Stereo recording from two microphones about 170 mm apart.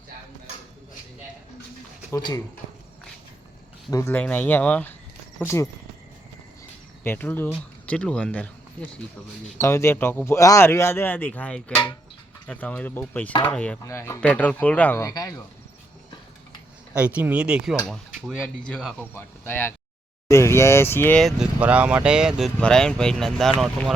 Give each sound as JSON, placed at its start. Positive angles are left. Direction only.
{"t": 2.1, "sound": "speech", "side_deg": 20}
{"t": 3.9, "sound": "speech", "side_deg": 15}
{"t": 7.0, "sound": "speech", "side_deg": 10}
{"t": 16.9, "sound": "speech", "side_deg": -5}
{"t": 19.1, "sound": "speech", "side_deg": 15}
{"t": 21.2, "sound": "speech", "side_deg": 0}